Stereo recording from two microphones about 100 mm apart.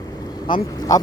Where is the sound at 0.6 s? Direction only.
35° left (ahead or behind).